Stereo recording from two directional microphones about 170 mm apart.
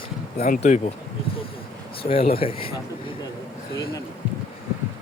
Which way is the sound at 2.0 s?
35° left (ahead or behind).